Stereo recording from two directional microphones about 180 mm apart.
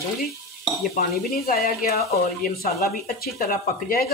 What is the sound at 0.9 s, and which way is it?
Speech, 50° left (ahead or behind).